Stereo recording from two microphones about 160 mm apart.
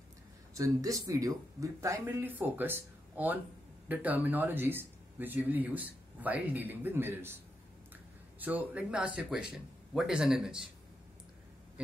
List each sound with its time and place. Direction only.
0.6 s speech: 20° right (ahead or behind)
8.4 s a man's voice: 10° right (ahead or behind)